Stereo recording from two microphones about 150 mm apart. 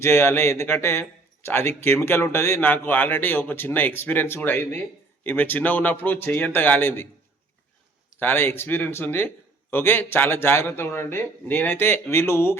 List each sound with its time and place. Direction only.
0.0 s a man's voice: 15° left (ahead or behind)
8.2 s a man's voice: 15° left (ahead or behind)